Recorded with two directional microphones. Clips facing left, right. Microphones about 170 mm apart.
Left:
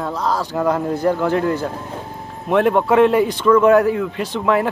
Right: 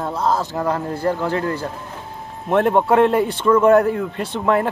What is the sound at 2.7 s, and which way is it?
Speech, 30° right (ahead or behind).